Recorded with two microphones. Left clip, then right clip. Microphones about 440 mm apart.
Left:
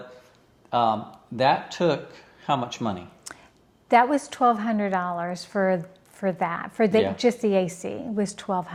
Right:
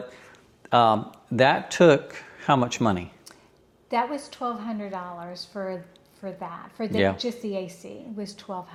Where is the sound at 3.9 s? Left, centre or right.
Left.